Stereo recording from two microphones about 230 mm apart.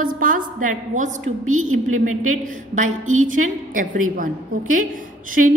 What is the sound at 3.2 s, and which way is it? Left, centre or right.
A woman's voice, right.